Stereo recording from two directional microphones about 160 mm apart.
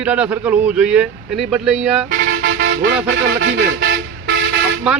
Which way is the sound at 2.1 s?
85° right.